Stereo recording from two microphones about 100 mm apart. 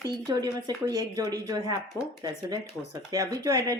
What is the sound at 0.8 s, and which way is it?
Speech, 40° right (ahead or behind).